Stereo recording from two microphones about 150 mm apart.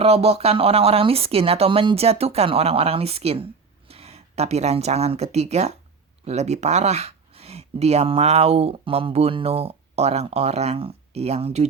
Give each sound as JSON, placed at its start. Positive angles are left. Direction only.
{"t": 0.0, "sound": "speech", "side_deg": -45}